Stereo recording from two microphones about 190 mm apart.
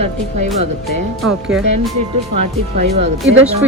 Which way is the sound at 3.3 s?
80° right.